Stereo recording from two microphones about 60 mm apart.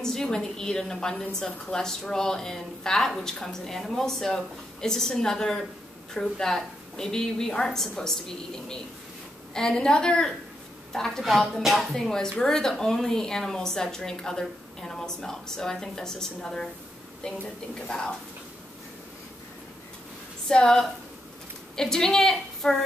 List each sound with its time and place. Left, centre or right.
0.0 s speech: centre
9.5 s speech: centre
17.8 s speech: centre
20.4 s speech: centre